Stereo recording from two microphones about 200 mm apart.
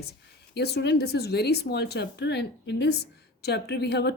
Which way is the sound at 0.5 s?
55° left (ahead or behind).